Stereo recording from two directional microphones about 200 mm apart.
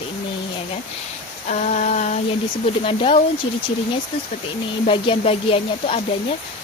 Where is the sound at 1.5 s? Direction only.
35° left (ahead or behind).